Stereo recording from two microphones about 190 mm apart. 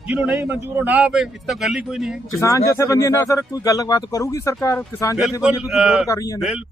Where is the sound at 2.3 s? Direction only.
15° left (ahead or behind).